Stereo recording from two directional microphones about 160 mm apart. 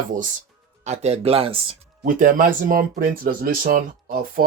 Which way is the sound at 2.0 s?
55° right (ahead or behind).